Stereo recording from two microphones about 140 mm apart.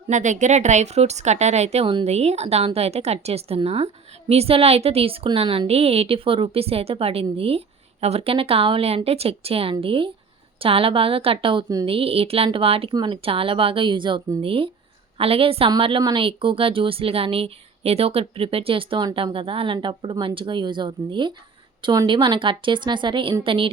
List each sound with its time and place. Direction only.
0.1 s speech: 60° right (ahead or behind); by 23.7 s 40° right (ahead or behind)